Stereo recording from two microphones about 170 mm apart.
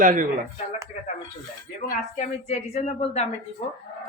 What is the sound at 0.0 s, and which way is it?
Speech, 50° right (ahead or behind).